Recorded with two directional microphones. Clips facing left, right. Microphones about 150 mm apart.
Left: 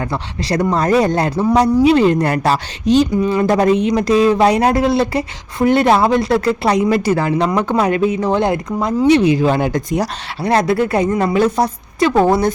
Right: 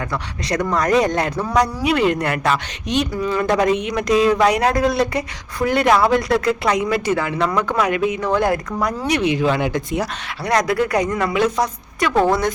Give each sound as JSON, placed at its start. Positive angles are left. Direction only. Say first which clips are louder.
{"t": 0.1, "sound": "speech", "louder": "left 3 dB", "side_deg": 30}
{"t": 10.4, "sound": "a woman's voice", "louder": "left 4 dB", "side_deg": 30}